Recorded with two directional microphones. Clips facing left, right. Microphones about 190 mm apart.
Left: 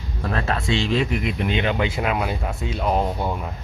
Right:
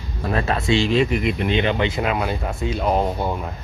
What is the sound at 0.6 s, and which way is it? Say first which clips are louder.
Speech: right 5 dB; centre (ahead or behind).